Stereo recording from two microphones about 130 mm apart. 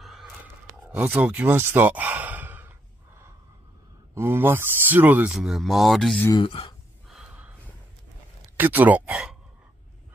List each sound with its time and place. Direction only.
0.0 s a sound: 5° right (ahead or behind)
0.8 s speech: 10° right (ahead or behind)
4.1 s speech: 20° right (ahead or behind); by 6.2 s 5° left (ahead or behind)
6.3 s speech: 40° left (ahead or behind)
7.1 s snort: 10° right (ahead or behind)
8.5 s speech: 15° right (ahead or behind)